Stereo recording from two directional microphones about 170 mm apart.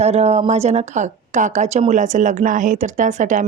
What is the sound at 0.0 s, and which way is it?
A woman's voice, 40° right (ahead or behind).